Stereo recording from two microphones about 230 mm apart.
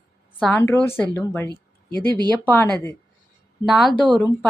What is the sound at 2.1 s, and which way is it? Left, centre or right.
Speech, centre.